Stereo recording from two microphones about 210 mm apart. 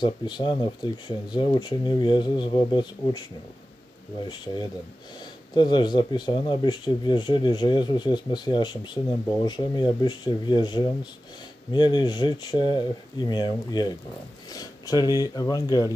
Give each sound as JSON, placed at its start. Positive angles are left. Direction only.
{"t": 0.0, "sound": "speech", "side_deg": 20}
{"t": 5.5, "sound": "speech", "side_deg": 20}